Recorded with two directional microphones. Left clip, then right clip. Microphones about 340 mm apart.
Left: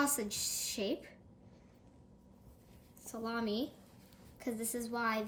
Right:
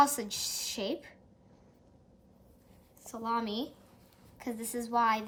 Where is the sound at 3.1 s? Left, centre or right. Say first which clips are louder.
Right 5 dB; right.